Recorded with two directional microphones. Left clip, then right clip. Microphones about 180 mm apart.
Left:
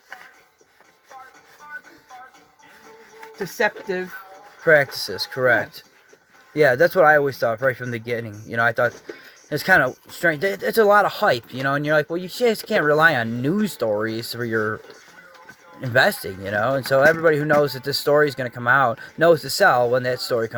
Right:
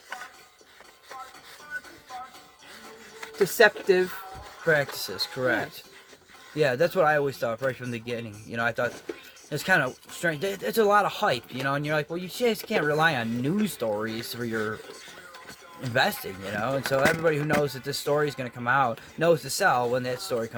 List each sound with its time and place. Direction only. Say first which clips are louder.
3.3 s speech: right 3 dB; 20° right (ahead or behind)
4.6 s speech: left 8 dB; 40° left (ahead or behind)
6.6 s speech: left 8 dB; 45° left (ahead or behind)
15.9 s speech: left 7 dB; 45° left (ahead or behind)